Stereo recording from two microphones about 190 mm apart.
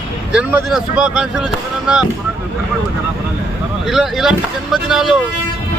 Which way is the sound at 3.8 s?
Centre (ahead or behind).